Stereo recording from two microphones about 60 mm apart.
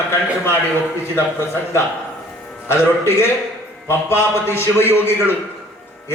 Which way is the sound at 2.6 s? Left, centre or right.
Left.